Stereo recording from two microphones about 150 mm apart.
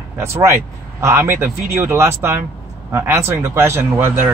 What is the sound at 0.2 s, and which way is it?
Speech, 15° right (ahead or behind).